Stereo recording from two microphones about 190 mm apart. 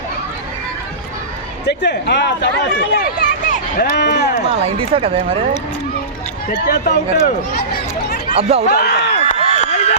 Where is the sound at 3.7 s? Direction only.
50° left (ahead or behind).